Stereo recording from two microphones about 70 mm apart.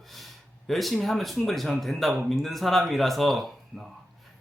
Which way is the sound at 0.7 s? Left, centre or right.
Centre.